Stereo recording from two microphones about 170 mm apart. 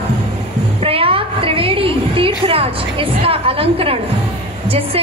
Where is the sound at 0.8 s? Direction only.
35° right (ahead or behind).